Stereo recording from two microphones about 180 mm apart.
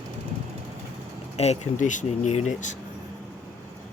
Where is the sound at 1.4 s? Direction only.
40° left (ahead or behind).